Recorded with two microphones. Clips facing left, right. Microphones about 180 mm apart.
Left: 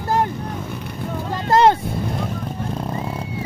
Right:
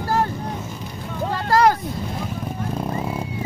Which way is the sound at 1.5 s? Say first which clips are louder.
Left 3 dB; 25° left (ahead or behind).